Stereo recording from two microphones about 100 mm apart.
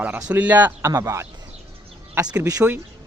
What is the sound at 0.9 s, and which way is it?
Speech, 35° right (ahead or behind).